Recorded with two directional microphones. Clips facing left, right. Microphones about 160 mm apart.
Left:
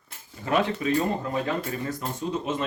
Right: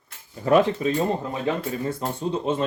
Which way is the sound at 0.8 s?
30° right (ahead or behind).